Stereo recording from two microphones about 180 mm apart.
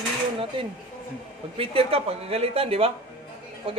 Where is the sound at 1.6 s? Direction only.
35° right (ahead or behind).